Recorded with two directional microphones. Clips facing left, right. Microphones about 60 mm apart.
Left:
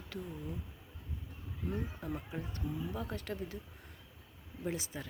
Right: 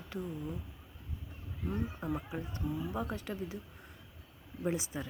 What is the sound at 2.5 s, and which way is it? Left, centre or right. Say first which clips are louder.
Speech: right 4 dB; right.